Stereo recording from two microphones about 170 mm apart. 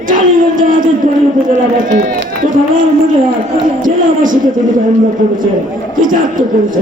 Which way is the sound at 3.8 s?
50° right (ahead or behind).